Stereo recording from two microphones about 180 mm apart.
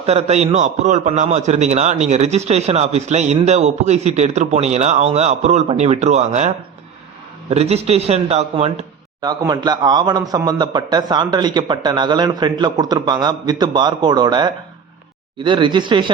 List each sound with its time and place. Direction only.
0.0 s a man's voice: 35° right (ahead or behind)
7.5 s a man's voice: 35° right (ahead or behind)
9.2 s a man's voice: 20° right (ahead or behind)